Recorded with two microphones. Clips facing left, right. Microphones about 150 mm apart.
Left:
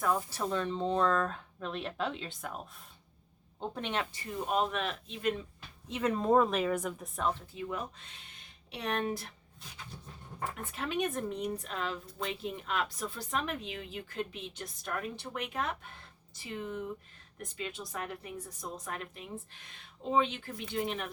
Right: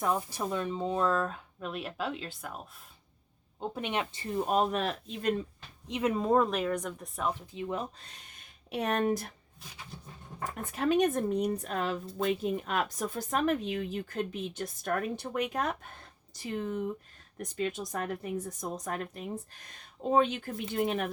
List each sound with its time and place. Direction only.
0.0 s speech: 20° right (ahead or behind); by 2.6 s centre (ahead or behind)
3.6 s speech: 10° right (ahead or behind)
4.1 s speech: 25° right (ahead or behind)
4.4 s speech: 40° right (ahead or behind)
5.9 s speech: 10° right (ahead or behind)
7.2 s speech: 10° right (ahead or behind)
7.5 s speech: 25° right (ahead or behind)
8.7 s speech: 45° right (ahead or behind)
10.6 s speech: 40° right (ahead or behind)